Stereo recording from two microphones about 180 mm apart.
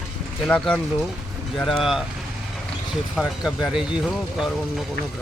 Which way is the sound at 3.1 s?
Centre (ahead or behind).